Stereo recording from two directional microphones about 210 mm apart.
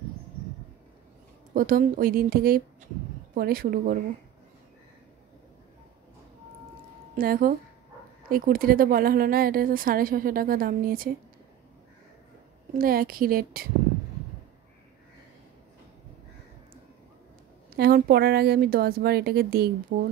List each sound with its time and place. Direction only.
1.5 s speech: 40° right (ahead or behind)
7.2 s speech: 45° right (ahead or behind)
12.7 s speech: 45° right (ahead or behind)
17.7 s speech: 45° right (ahead or behind)